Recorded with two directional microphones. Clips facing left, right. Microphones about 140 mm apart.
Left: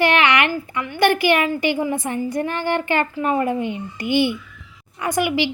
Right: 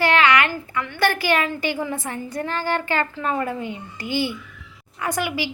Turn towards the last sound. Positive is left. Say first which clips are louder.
# left 5 dB
turn(degrees=20)  # may be behind; listen again after turning